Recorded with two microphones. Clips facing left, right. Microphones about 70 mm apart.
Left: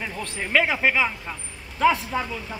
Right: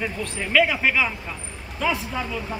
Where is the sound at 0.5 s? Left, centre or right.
Left.